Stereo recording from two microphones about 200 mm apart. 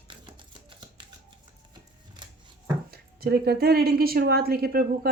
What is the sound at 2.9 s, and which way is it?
Speech, 50° right (ahead or behind).